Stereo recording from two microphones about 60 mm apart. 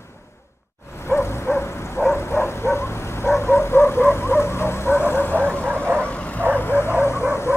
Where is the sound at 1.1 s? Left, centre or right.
Left.